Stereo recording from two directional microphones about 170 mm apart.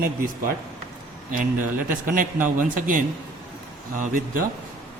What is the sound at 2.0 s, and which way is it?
Speech, 50° right (ahead or behind).